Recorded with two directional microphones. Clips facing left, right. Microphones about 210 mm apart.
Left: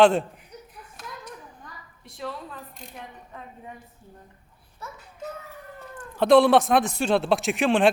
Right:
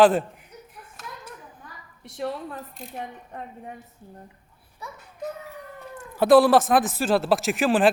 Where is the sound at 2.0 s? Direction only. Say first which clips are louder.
Right 5 dB; 75° right (ahead or behind).